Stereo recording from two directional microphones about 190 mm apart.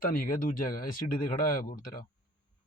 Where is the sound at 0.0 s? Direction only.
50° left (ahead or behind).